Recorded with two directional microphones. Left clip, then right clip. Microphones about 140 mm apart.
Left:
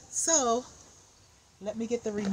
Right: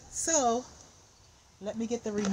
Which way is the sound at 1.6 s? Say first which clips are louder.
Left 2 dB; 20° left (ahead or behind).